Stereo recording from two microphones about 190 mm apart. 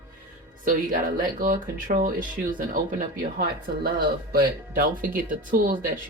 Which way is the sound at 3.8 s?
55° right (ahead or behind).